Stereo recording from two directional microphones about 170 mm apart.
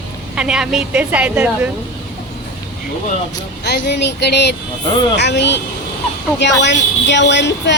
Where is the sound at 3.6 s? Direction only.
75° left (ahead or behind).